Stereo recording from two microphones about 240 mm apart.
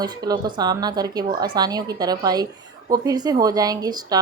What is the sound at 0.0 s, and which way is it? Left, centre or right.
Speech, centre.